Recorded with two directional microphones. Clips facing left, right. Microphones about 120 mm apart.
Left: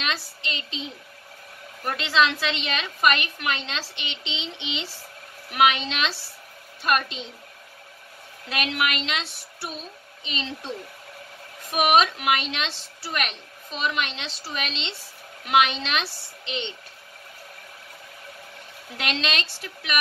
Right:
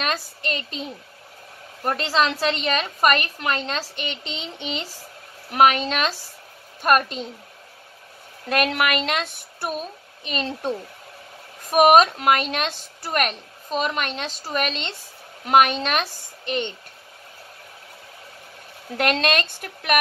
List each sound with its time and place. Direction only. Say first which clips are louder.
0.0 s a sound: right 4 dB; 45° right (ahead or behind)
1.9 s a woman's voice: right 1 dB; 40° right (ahead or behind)
8.5 s a woman's voice: right 5 dB; 50° right (ahead or behind)
11.7 s a woman's voice: right 6 dB; 45° right (ahead or behind)
18.9 s a woman's voice: right 7 dB; 50° right (ahead or behind)